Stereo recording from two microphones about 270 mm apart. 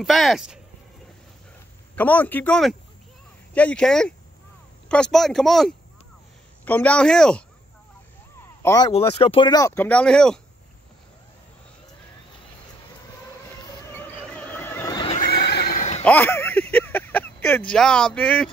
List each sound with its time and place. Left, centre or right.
0.0 s speech: centre
2.0 s speech: centre
8.6 s speech: centre
13.8 s neigh: centre
15.1 s neigh: left
16.0 s a sound: centre